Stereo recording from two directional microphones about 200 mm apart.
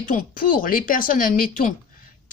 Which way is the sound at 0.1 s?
40° left (ahead or behind).